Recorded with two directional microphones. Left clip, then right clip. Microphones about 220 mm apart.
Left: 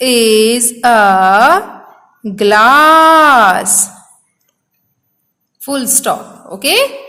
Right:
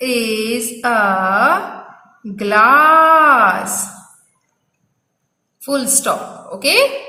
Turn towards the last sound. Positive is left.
turn(degrees=45)  # may be behind; listen again after turning